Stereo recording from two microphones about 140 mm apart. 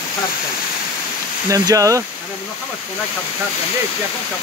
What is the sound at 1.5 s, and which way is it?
Speech, 25° right (ahead or behind).